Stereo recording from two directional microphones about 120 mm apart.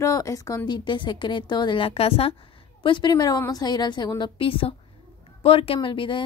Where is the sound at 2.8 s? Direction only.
40° left (ahead or behind).